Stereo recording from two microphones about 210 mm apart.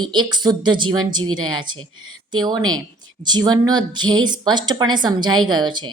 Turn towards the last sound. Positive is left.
turn(degrees=-20)  # may be behind; listen again after turning